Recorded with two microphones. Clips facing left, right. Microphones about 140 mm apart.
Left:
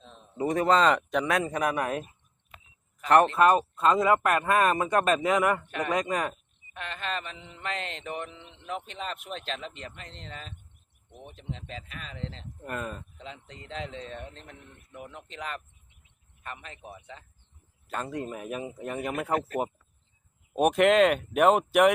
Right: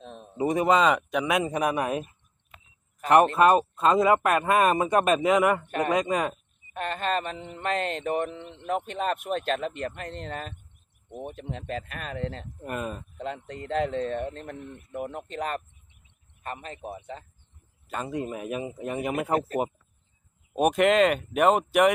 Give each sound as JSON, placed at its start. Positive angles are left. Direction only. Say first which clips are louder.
{"t": 0.0, "sound": "a sound", "louder": "right 8 dB", "side_deg": -60}
{"t": 0.3, "sound": "speech", "louder": "right 1 dB", "side_deg": -15}
{"t": 3.3, "sound": "speech", "louder": "right 2 dB", "side_deg": -15}
{"t": 6.7, "sound": "mantra", "louder": "right 7 dB", "side_deg": -45}
{"t": 12.6, "sound": "speech", "louder": "right 3 dB", "side_deg": -15}
{"t": 13.1, "sound": "mantra", "louder": "right 10 dB", "side_deg": -55}
{"t": 16.4, "sound": "a man's voice", "louder": "right 6 dB", "side_deg": -40}
{"t": 17.8, "sound": "speech", "louder": "right 2 dB", "side_deg": -5}
{"t": 19.3, "sound": "a man's voice", "louder": "right 1 dB", "side_deg": -35}
{"t": 20.5, "sound": "speech", "louder": "even", "side_deg": 0}